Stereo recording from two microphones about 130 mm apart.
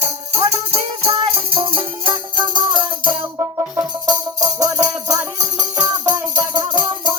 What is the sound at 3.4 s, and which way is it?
Music, 25° right (ahead or behind).